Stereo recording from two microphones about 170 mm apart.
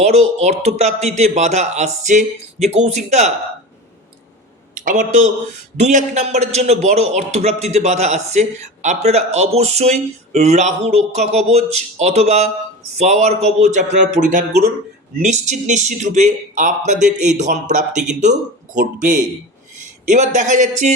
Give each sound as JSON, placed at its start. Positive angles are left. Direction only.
{"t": 0.0, "sound": "a man's voice", "side_deg": -40}
{"t": 4.7, "sound": "a man's voice", "side_deg": -45}